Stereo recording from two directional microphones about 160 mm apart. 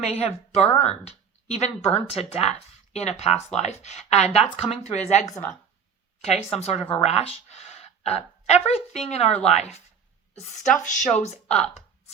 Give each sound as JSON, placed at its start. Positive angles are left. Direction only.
{"t": 0.0, "sound": "a woman's voice", "side_deg": 40}
{"t": 6.2, "sound": "a woman's voice", "side_deg": 40}
{"t": 10.8, "sound": "speech", "side_deg": 50}